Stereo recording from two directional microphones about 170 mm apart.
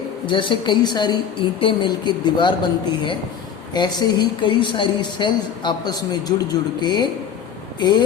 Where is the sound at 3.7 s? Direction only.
25° left (ahead or behind).